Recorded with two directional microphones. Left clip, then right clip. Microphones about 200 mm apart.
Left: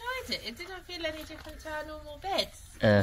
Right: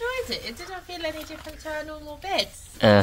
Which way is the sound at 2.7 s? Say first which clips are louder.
Right 7 dB; 20° right (ahead or behind).